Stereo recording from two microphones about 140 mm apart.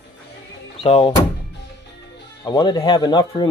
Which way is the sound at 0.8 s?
45° left (ahead or behind).